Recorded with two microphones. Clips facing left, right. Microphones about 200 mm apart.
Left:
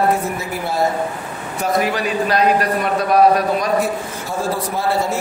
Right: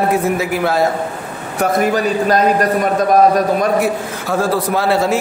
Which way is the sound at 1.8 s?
45° right (ahead or behind).